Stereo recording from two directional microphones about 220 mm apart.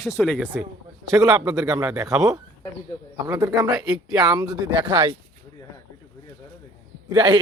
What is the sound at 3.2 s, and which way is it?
Speech, 15° right (ahead or behind).